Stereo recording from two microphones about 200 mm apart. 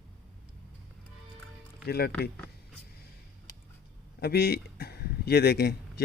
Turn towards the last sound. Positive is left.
turn(degrees=55)  # may be behind; listen again after turning